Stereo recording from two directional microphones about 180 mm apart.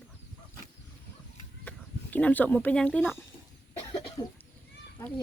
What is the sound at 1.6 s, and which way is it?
Speech, 10° left (ahead or behind).